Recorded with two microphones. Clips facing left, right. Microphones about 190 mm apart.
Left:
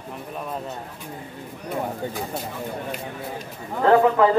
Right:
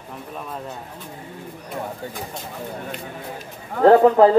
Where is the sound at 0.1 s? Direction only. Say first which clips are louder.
Left 1 dB; 5° left (ahead or behind).